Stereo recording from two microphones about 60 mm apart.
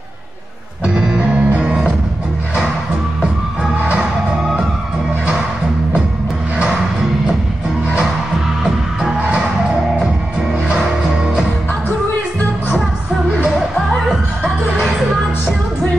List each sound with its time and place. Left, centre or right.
0.8 s music: centre
9.0 s music: centre